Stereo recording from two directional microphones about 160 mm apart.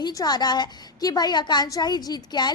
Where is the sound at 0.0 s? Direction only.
25° left (ahead or behind).